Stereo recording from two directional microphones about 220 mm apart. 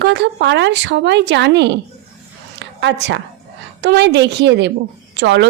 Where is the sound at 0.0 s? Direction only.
50° right (ahead or behind).